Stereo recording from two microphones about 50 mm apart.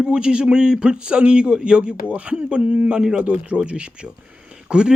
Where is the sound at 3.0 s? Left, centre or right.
Centre.